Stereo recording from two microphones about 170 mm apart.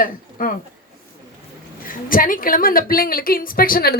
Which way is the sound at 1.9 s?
55° left (ahead or behind).